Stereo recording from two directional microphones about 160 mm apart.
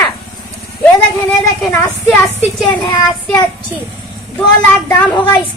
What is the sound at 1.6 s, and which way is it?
A woman's voice, 20° left (ahead or behind).